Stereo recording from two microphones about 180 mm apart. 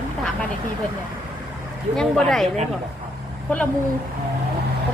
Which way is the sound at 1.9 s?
Centre (ahead or behind).